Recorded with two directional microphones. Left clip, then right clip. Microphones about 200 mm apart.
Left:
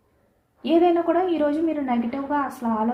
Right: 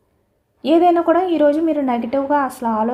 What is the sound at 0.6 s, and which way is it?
A woman's voice, 50° right (ahead or behind).